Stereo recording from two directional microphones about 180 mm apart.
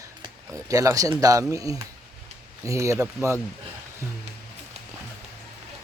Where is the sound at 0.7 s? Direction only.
20° right (ahead or behind).